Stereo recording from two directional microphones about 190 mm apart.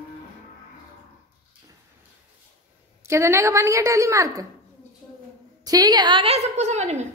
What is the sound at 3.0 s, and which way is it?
A woman's voice, 15° right (ahead or behind).